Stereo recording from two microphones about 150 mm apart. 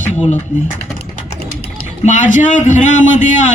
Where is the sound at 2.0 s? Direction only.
55° left (ahead or behind).